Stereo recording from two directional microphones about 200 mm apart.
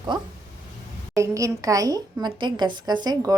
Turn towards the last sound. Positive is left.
turn(degrees=-20)  # may be behind; listen again after turning